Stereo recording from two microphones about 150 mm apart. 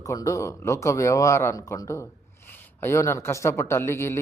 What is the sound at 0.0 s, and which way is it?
A man's voice, 25° left (ahead or behind).